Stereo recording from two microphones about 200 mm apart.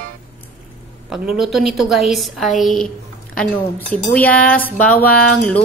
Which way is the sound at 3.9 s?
10° left (ahead or behind).